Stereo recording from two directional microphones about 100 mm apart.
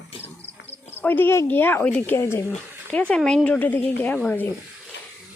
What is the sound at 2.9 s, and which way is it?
Speech, 10° left (ahead or behind).